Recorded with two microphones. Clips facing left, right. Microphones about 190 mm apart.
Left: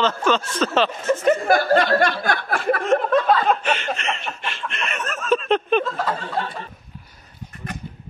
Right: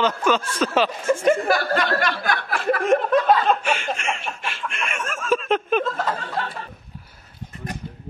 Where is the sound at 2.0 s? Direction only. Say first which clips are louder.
Left 2 dB; 50° left (ahead or behind).